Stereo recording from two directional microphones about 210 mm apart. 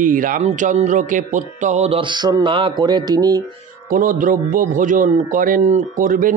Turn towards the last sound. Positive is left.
turn(degrees=-40)  # may be behind; listen again after turning